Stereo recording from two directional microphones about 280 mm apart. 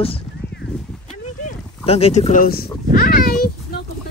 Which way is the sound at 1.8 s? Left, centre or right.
Left.